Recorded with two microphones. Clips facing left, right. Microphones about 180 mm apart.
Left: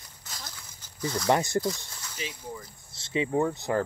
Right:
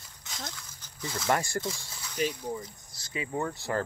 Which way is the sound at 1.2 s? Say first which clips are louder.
Left 4 dB; 20° left (ahead or behind).